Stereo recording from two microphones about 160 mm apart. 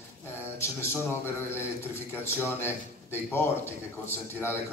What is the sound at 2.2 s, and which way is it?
Speech, 15° left (ahead or behind).